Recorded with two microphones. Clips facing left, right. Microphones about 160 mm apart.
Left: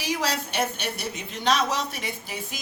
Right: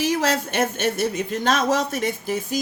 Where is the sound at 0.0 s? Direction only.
50° right (ahead or behind).